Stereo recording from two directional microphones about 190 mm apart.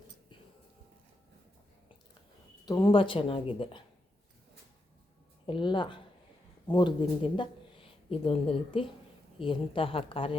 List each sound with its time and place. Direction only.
2.6 s speech: 25° left (ahead or behind)
5.5 s speech: 25° left (ahead or behind)